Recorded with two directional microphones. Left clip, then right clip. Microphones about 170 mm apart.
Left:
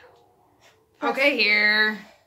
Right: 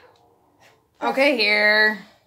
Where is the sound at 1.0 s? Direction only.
60° right (ahead or behind).